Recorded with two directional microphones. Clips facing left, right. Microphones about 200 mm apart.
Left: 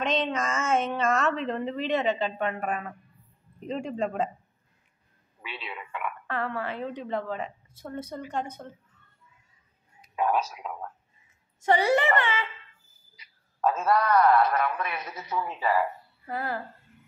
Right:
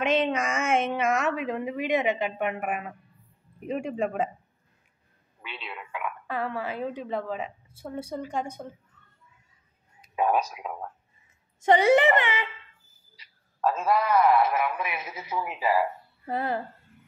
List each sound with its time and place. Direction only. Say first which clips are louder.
0.0 s a woman's voice: right 3 dB; 10° right (ahead or behind)
5.4 s a woman's voice: left 1 dB; centre (ahead or behind)
10.1 s a child's voice: right 2 dB; 15° right (ahead or behind)
13.6 s a woman's voice: even; centre (ahead or behind)
16.3 s a child's voice: right 3 dB; 25° right (ahead or behind)